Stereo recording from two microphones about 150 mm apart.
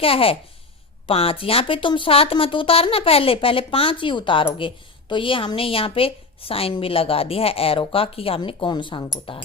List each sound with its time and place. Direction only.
0.0 s speech: 40° left (ahead or behind)